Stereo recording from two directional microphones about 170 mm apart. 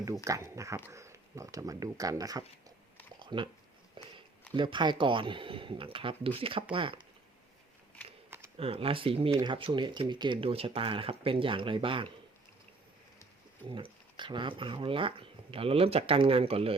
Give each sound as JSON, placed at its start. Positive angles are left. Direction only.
{"t": 0.3, "sound": "speech", "side_deg": -20}
{"t": 3.2, "sound": "a sound", "side_deg": -30}
{"t": 4.0, "sound": "speech", "side_deg": -30}
{"t": 8.5, "sound": "speech", "side_deg": -35}
{"t": 13.7, "sound": "speech", "side_deg": -30}